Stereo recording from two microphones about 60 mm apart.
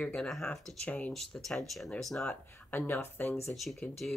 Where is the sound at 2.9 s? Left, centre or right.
Left.